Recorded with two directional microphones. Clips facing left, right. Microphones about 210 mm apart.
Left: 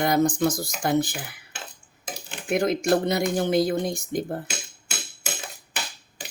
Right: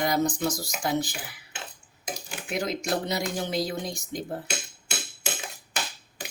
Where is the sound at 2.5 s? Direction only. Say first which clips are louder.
Left 7 dB; 55° left (ahead or behind).